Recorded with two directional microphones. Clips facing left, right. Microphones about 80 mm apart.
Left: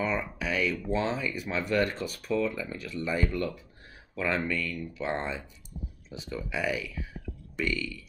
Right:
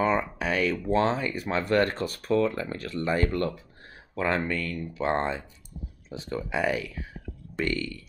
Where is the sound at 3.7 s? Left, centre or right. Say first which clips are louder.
Right 4 dB; right.